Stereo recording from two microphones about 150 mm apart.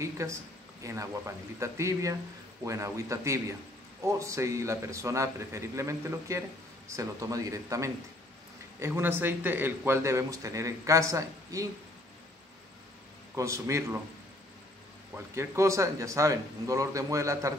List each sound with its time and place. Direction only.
0.0 s a man's voice: 20° right (ahead or behind)
13.4 s a man's voice: 20° right (ahead or behind)
15.3 s a man's voice: 20° right (ahead or behind)